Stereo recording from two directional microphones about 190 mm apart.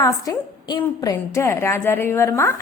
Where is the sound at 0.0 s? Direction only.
20° left (ahead or behind).